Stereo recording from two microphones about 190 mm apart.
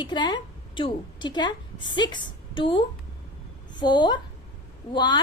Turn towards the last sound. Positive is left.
turn(degrees=25)  # may be behind; listen again after turning